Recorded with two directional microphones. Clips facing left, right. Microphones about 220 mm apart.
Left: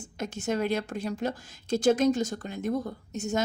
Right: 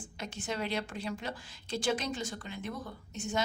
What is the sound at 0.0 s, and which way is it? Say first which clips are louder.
Speech: left 8 dB; 45° left (ahead or behind).